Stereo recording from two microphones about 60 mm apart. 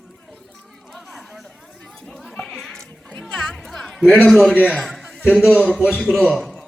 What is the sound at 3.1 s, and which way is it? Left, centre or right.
Music, centre.